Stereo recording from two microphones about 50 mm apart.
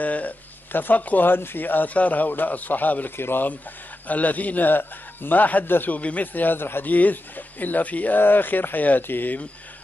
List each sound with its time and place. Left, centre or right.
0.0 s a man's voice: left
3.2 s speech: left
4.1 s a man's voice: left
6.9 s a man's voice: left